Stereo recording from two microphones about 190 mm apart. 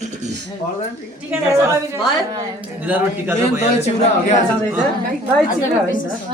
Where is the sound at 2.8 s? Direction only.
10° right (ahead or behind).